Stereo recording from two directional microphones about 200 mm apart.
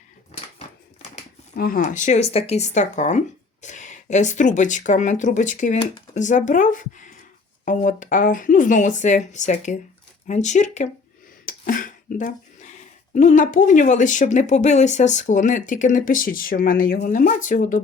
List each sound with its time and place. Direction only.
1.5 s speech: 45° left (ahead or behind)
11.4 s a sound: 45° left (ahead or behind)
13.1 s speech: 40° left (ahead or behind)